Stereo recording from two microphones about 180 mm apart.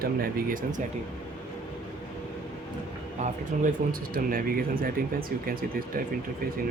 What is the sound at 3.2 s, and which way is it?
Speech, 50° right (ahead or behind).